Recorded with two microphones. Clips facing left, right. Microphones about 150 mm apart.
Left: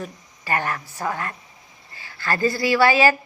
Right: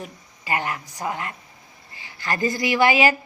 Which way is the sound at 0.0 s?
15° right (ahead or behind).